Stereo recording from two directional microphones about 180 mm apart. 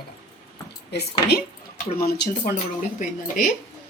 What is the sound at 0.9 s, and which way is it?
Speech, 60° left (ahead or behind).